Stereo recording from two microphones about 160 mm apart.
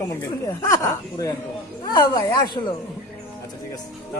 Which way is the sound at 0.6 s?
20° left (ahead or behind).